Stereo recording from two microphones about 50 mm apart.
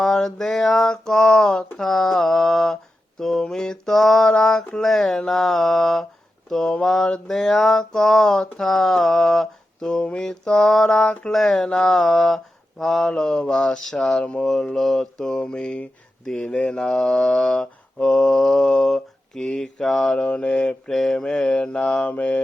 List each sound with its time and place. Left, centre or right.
0.0 s mantra: centre
3.2 s a sound: centre
3.4 s mantra: centre
9.9 s mantra: centre
10.5 s mantra: centre
10.9 s mantra: left
11.3 s mantra: centre
15.4 s mantra: centre
16.2 s mantra: centre
16.8 s mantra: centre
20.2 s mantra: left
20.9 s mantra: centre; by 22.4 s left